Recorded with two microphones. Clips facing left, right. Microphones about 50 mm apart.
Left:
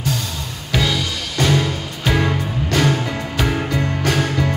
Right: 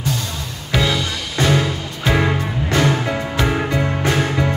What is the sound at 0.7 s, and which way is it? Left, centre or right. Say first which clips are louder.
Music: right 1 dB; centre.